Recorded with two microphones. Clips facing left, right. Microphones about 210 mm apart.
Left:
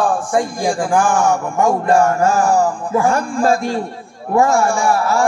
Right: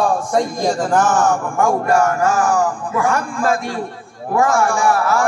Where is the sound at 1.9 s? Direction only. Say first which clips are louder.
Left 2 dB; 25° left (ahead or behind).